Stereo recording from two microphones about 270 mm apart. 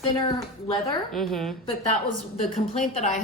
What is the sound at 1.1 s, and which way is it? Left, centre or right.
Speech, centre.